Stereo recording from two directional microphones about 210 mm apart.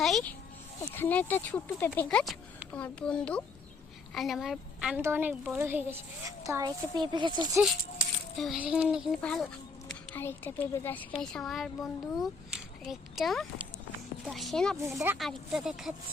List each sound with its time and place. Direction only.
0.0 s a sound: centre (ahead or behind)
0.9 s a child's voice: 10° left (ahead or behind); by 7.6 s 20° right (ahead or behind)
8.4 s a woman's voice: 5° right (ahead or behind)
14.8 s speech: 10° right (ahead or behind)
15.2 s speech: centre (ahead or behind)